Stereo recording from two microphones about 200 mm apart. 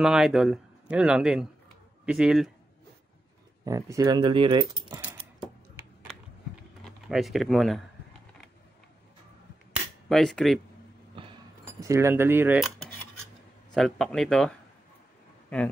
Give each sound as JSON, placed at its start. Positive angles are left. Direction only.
{"t": 0.0, "sound": "speech", "side_deg": 0}
{"t": 3.6, "sound": "speech", "side_deg": -15}
{"t": 7.1, "sound": "speech", "side_deg": 0}
{"t": 10.0, "sound": "speech", "side_deg": 0}
{"t": 11.8, "sound": "cutlery", "side_deg": -15}
{"t": 13.7, "sound": "speech", "side_deg": 5}